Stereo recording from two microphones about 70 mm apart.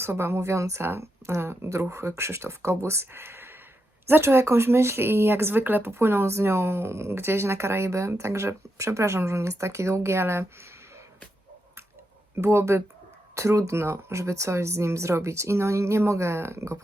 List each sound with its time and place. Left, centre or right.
0.0 s speech: right
12.4 s speech: right